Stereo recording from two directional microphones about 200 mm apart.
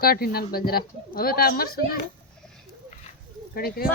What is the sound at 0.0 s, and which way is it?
Speech, 50° left (ahead or behind).